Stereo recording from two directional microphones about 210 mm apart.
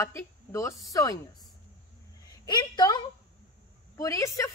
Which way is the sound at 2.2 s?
20° left (ahead or behind).